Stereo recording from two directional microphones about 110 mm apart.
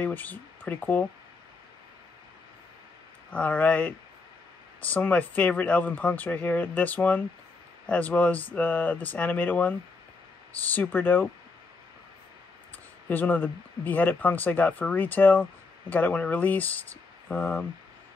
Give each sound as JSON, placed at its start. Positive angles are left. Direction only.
{"t": 0.0, "sound": "speech", "side_deg": 15}
{"t": 3.3, "sound": "speech", "side_deg": 10}
{"t": 13.1, "sound": "speech", "side_deg": 15}